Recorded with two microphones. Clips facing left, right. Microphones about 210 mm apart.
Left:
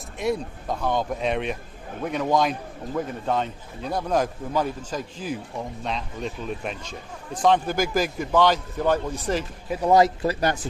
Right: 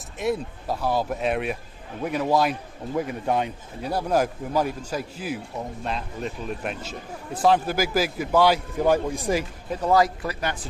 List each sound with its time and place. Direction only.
0.2 s a man's voice: 5° right (ahead or behind)
9.6 s speech: 10° left (ahead or behind)
9.9 s speech: 25° left (ahead or behind)